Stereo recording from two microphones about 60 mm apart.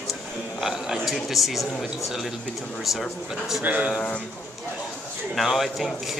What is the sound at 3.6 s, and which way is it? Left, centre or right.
Speech, right.